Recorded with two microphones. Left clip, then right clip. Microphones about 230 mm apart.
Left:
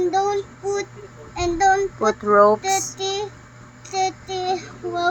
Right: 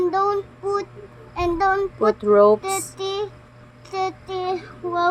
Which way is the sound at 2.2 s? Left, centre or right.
Right.